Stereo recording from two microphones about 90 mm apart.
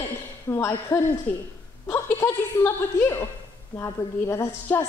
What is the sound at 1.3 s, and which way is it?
Speech, 20° left (ahead or behind).